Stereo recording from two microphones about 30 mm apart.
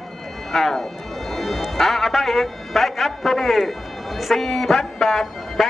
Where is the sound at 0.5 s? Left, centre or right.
Centre.